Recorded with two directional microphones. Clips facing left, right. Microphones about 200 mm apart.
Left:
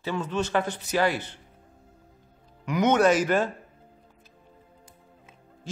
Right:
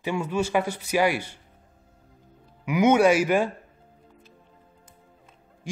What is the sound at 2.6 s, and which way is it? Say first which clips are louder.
Speech: right 2 dB; 10° right (ahead or behind).